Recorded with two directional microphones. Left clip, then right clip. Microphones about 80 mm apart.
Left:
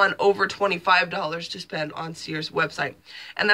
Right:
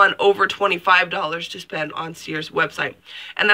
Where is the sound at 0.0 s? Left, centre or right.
Left.